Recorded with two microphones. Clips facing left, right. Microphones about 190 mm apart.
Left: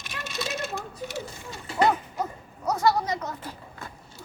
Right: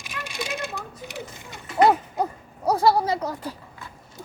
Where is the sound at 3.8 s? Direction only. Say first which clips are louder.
Left 2 dB; 45° left (ahead or behind).